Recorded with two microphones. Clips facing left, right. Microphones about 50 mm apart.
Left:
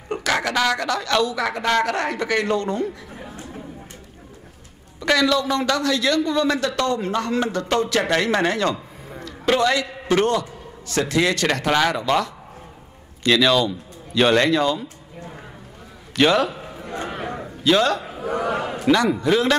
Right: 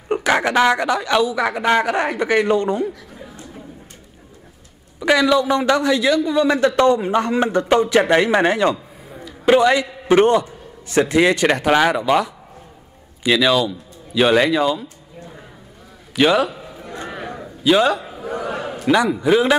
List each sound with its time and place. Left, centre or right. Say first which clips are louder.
0.1 s speech: right 5 dB; right
3.2 s chatter: left 1 dB; left
5.0 s a man's voice: right 4 dB; centre
16.2 s speech: right 2 dB; centre
16.4 s a sound: left 1 dB; left
17.6 s speech: right 3 dB; centre
18.0 s a sound: left 2 dB; left
19.1 s speech: right 3 dB; centre